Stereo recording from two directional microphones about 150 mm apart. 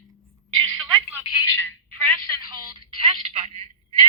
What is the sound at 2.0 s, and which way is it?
Telephone, 30° right (ahead or behind).